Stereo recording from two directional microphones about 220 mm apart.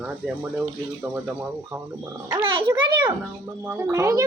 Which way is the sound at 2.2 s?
20° right (ahead or behind).